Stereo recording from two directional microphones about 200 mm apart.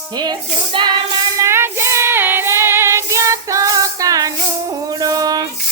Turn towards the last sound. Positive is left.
turn(degrees=-20)  # may be behind; listen again after turning